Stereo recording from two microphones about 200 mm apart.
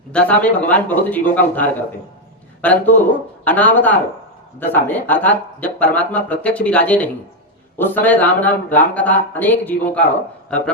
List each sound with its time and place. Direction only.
0.1 s speech: 5° left (ahead or behind)